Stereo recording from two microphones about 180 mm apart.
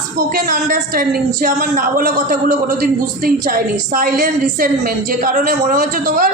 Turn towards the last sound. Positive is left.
turn(degrees=-45)  # may be behind; listen again after turning